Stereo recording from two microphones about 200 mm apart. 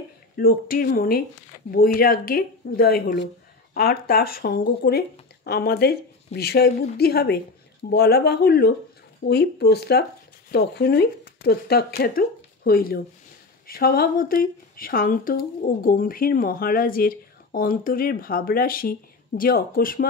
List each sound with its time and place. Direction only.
0.4 s speech: 45° left (ahead or behind)